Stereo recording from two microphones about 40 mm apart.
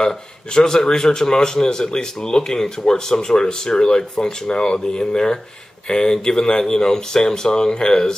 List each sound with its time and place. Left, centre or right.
0.6 s speech: centre